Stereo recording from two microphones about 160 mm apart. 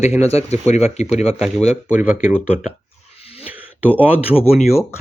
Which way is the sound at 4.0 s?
10° right (ahead or behind).